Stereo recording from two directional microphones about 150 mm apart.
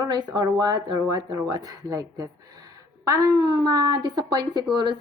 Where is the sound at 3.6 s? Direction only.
25° right (ahead or behind).